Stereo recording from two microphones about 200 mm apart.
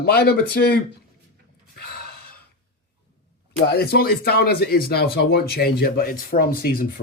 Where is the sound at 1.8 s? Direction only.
50° left (ahead or behind).